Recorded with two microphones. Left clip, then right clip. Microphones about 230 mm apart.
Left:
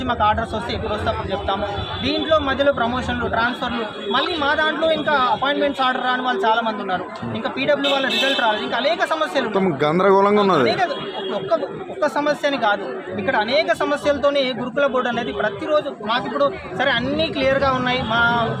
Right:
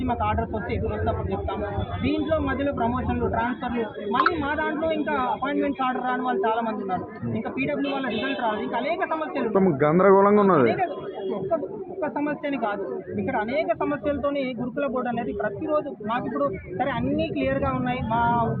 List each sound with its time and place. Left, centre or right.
0.1 s a man's voice: left
8.4 s a man's voice: left